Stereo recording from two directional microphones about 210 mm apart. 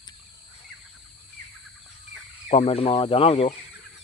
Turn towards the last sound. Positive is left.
turn(degrees=30)  # may be behind; listen again after turning